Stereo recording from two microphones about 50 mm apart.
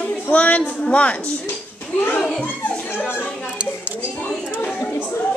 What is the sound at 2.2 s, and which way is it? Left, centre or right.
Speech, centre.